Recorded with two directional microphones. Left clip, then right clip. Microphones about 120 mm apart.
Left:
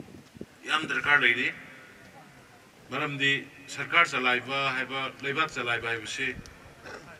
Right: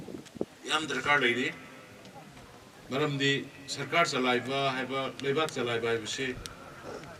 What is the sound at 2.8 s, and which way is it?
A man's voice, 25° left (ahead or behind).